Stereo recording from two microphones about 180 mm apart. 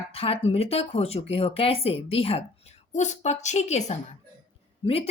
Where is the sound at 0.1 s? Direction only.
30° left (ahead or behind).